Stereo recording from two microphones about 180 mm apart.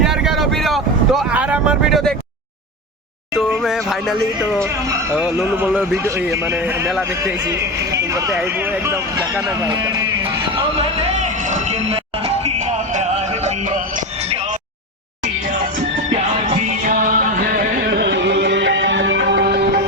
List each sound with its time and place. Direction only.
0.0 s vehicle: centre (ahead or behind)
3.3 s music: centre (ahead or behind)
4.6 s speech: 15° right (ahead or behind)
11.2 s music: 40° right (ahead or behind)
16.8 s music: 50° right (ahead or behind); by 19.8 s 65° right (ahead or behind)